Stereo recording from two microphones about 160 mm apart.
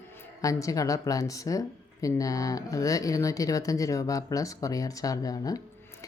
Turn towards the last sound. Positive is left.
turn(degrees=20)  # may be behind; listen again after turning